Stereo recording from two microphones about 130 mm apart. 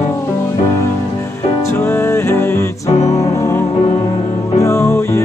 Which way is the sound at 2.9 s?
55° left (ahead or behind).